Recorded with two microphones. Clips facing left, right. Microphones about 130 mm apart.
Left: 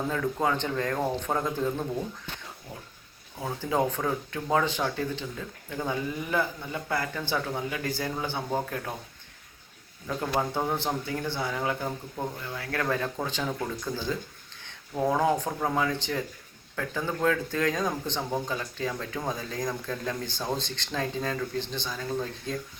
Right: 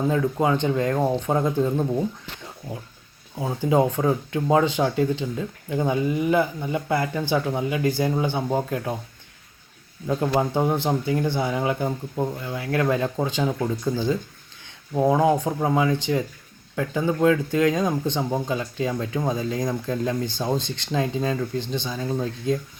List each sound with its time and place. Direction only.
0.1 s speech: 15° right (ahead or behind)
3.3 s speech: 20° right (ahead or behind)
10.2 s speech: 20° right (ahead or behind)